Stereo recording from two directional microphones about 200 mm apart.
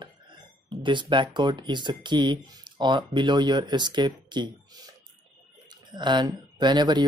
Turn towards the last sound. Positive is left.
turn(degrees=-20)  # may be behind; listen again after turning